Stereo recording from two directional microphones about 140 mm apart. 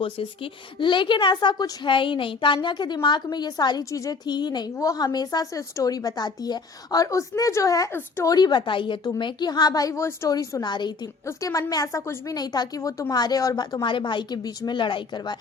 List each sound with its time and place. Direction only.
0.0 s a woman's voice: 40° left (ahead or behind)